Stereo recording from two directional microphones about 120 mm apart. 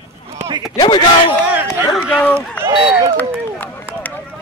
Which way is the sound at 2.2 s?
10° left (ahead or behind).